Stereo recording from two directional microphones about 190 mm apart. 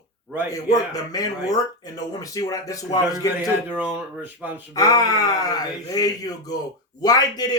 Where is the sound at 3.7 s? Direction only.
10° right (ahead or behind).